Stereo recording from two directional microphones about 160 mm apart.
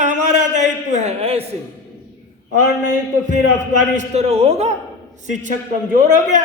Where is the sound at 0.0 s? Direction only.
50° right (ahead or behind).